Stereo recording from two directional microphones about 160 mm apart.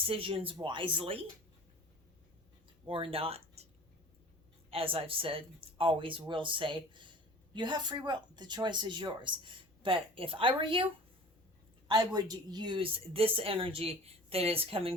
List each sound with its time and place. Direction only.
0.0 s speech: 35° right (ahead or behind)
2.8 s speech: 35° right (ahead or behind)
4.7 s speech: 35° right (ahead or behind)
11.9 s speech: 25° right (ahead or behind)